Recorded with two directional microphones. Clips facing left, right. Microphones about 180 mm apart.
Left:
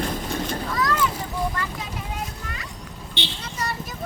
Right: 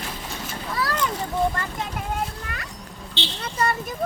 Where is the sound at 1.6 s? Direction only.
50° right (ahead or behind).